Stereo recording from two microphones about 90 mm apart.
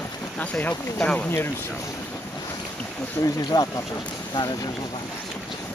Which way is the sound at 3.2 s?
50° left (ahead or behind).